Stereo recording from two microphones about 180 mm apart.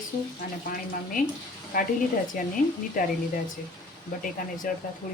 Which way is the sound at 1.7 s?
50° left (ahead or behind).